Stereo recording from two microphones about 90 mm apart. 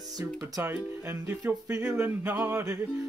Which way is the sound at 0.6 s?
25° right (ahead or behind).